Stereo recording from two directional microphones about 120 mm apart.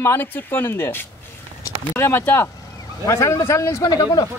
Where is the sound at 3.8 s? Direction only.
35° left (ahead or behind).